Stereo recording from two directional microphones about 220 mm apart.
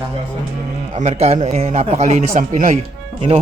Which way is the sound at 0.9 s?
30° right (ahead or behind).